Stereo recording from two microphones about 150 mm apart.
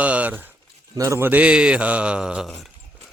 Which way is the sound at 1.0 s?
20° right (ahead or behind).